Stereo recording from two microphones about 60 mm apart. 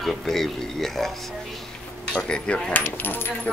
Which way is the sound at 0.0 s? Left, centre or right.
Centre.